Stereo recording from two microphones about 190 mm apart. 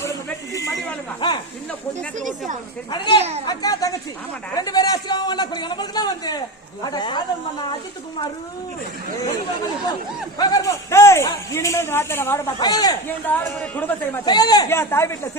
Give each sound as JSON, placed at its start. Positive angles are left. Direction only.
{"t": 0.0, "sound": "a sound", "side_deg": 15}
{"t": 2.9, "sound": "a man's voice", "side_deg": 25}
{"t": 3.2, "sound": "a child's voice", "side_deg": -35}
{"t": 3.4, "sound": "a man's voice", "side_deg": 20}
{"t": 10.3, "sound": "a man's voice", "side_deg": 20}
{"t": 13.3, "sound": "speech", "side_deg": 10}
{"t": 14.3, "sound": "speech", "side_deg": 20}